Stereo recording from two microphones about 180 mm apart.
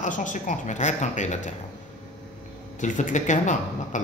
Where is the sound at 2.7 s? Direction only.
45° left (ahead or behind).